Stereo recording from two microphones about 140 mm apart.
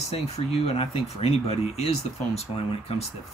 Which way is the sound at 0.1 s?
45° left (ahead or behind).